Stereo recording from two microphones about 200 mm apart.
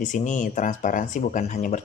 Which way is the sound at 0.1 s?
40° left (ahead or behind).